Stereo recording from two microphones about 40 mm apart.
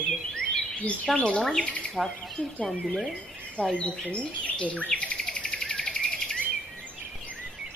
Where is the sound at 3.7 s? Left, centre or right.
Left.